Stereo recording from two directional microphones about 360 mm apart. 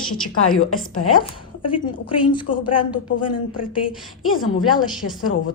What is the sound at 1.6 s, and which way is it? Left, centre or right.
A woman's voice, centre.